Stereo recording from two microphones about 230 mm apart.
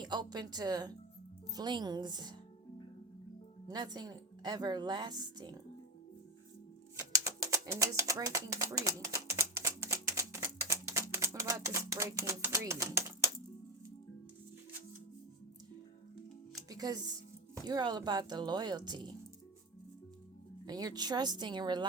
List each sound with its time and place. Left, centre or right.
0.0 s a woman's voice: centre
3.7 s a woman's voice: centre
7.3 s a sound: centre
16.6 s a woman's voice: centre
20.7 s a woman's voice: centre